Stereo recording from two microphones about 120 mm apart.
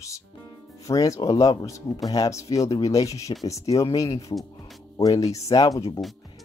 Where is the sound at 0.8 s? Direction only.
30° left (ahead or behind).